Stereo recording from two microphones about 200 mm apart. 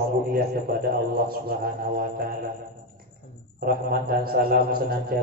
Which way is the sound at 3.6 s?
50° right (ahead or behind).